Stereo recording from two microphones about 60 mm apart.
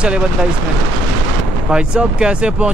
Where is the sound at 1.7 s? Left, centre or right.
Centre.